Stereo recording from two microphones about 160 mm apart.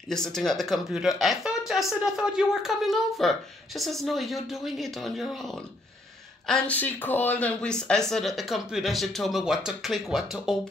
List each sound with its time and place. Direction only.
0.1 s speech: 5° left (ahead or behind)